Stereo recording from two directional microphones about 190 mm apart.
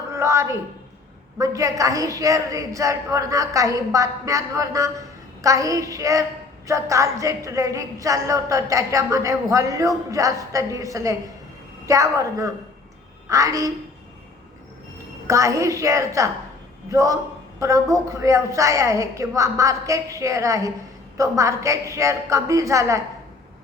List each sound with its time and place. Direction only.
0.1 s a sound: 15° right (ahead or behind)
1.4 s a woman's voice: 15° right (ahead or behind)
15.3 s a woman's voice: 15° right (ahead or behind)